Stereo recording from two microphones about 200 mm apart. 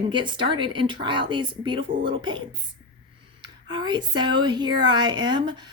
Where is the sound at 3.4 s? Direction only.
20° right (ahead or behind).